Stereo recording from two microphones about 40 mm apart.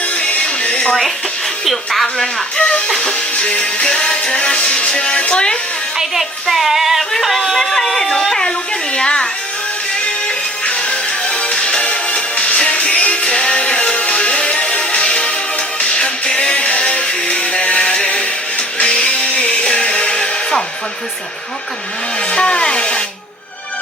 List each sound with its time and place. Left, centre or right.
0.2 s music: left
1.6 s speech: centre
2.2 s music: left
6.0 s speech: centre; by 9.2 s left
10.2 s music: left
22.3 s rub: left